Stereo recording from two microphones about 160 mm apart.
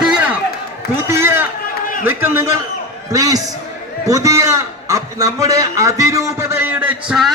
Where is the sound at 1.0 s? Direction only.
15° right (ahead or behind).